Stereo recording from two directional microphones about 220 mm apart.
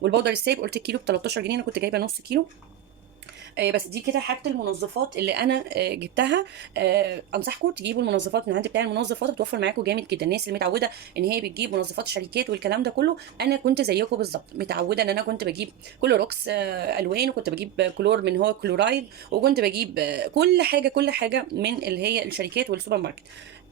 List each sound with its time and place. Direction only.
0.0 s speech: 50° right (ahead or behind)
3.5 s speech: 45° right (ahead or behind)
5.2 s speech: 45° right (ahead or behind)